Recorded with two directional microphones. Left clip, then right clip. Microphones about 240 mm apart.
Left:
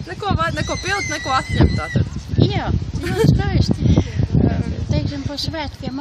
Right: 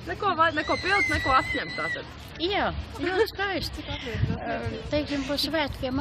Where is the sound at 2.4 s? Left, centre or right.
Centre.